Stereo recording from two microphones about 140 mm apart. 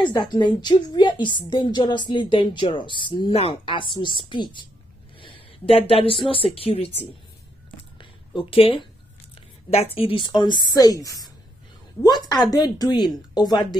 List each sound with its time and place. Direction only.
0.0 s a woman's voice: 35° left (ahead or behind)
8.0 s a sound: 35° left (ahead or behind)
9.9 s a woman's voice: 40° left (ahead or behind)